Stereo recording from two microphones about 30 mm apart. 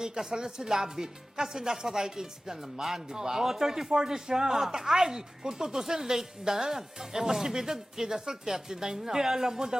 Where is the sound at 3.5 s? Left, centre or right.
Centre.